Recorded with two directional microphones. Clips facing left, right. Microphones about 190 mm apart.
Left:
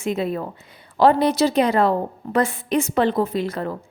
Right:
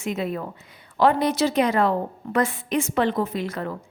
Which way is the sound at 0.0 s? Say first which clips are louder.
Left 3 dB; 30° left (ahead or behind).